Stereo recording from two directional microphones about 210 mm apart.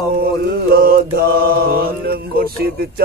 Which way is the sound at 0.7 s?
45° right (ahead or behind).